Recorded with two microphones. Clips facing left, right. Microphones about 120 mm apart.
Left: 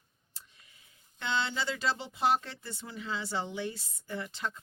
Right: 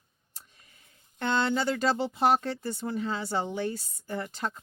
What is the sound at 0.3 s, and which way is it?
Tick, 45° right (ahead or behind).